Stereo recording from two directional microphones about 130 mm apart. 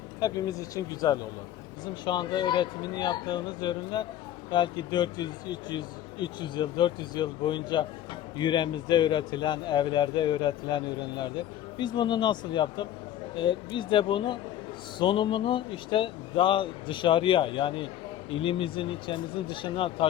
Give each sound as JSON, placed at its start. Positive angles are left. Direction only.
{"t": 0.2, "sound": "speech", "side_deg": 30}